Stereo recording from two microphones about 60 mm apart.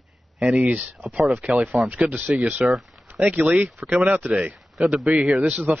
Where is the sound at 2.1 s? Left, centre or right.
Centre.